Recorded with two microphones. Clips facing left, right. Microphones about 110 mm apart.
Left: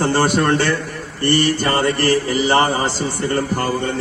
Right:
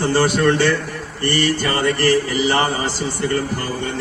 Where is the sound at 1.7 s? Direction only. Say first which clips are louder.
Right 2 dB; 40° left (ahead or behind).